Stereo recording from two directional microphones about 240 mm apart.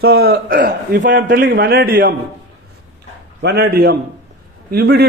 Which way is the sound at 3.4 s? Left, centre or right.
Right.